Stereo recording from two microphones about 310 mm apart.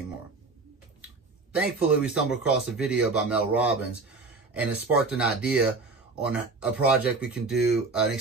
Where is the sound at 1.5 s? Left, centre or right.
Centre.